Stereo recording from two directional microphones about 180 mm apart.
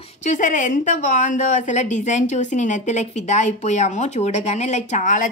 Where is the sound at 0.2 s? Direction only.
45° left (ahead or behind).